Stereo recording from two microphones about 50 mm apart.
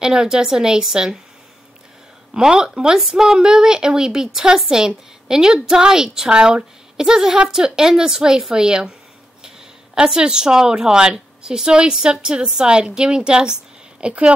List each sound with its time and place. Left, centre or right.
0.0 s a woman's voice: centre
2.3 s a woman's voice: centre
9.9 s a woman's voice: centre